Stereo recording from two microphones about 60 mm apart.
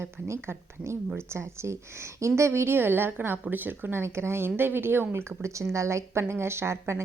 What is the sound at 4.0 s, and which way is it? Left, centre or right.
A woman's voice, right.